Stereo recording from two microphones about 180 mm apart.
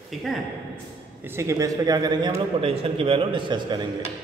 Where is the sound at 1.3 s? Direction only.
15° right (ahead or behind).